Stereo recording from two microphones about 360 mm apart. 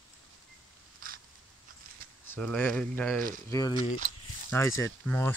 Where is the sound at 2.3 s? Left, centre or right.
Centre.